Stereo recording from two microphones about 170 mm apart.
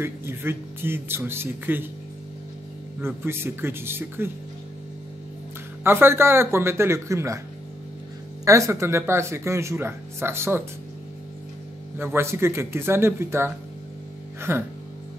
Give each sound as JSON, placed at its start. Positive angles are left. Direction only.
{"t": 0.0, "sound": "speech", "side_deg": -15}
{"t": 3.0, "sound": "speech", "side_deg": -15}
{"t": 5.9, "sound": "speech", "side_deg": -15}
{"t": 8.5, "sound": "speech", "side_deg": -15}
{"t": 12.0, "sound": "speech", "side_deg": -15}
{"t": 14.5, "sound": "speech", "side_deg": -15}